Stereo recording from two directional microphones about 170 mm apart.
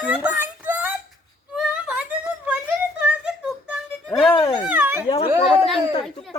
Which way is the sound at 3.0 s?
5° right (ahead or behind).